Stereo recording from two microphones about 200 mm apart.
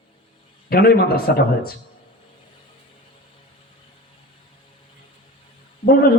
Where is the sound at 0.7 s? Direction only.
50° left (ahead or behind).